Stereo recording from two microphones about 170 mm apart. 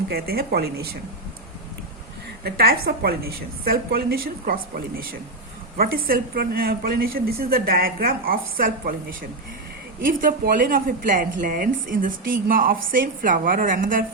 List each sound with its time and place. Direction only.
0.1 s a woman's voice: 65° right (ahead or behind)
2.4 s a woman's voice: 60° right (ahead or behind)